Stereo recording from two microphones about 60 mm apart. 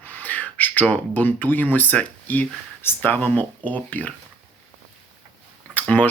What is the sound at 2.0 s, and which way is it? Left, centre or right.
Speech, left.